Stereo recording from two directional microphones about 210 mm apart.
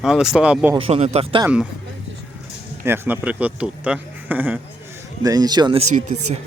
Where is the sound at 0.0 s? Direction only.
Centre (ahead or behind).